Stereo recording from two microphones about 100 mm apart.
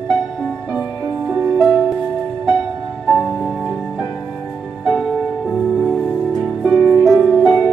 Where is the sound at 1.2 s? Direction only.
15° right (ahead or behind).